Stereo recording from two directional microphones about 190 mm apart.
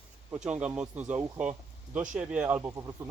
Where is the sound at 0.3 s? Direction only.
5° right (ahead or behind).